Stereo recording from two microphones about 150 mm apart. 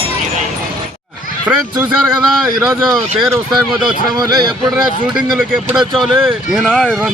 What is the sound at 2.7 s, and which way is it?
Speech, centre (ahead or behind).